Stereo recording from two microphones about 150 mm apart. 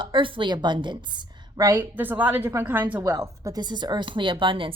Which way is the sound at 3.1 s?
20° right (ahead or behind).